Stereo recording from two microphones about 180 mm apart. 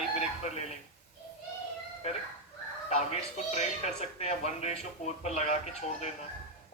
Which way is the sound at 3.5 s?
40° left (ahead or behind).